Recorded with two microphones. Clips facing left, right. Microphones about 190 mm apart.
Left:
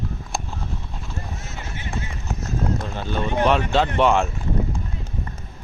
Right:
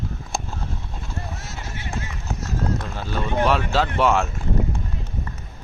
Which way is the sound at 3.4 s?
5° right (ahead or behind).